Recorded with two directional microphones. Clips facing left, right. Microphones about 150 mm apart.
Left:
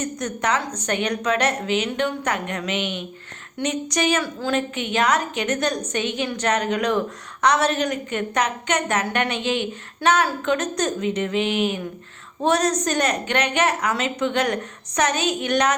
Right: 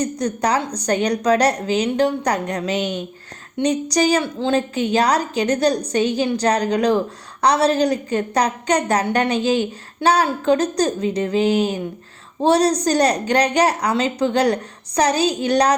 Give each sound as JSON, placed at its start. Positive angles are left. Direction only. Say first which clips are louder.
{"t": 0.0, "sound": "a woman's voice", "louder": "right 5 dB", "side_deg": -35}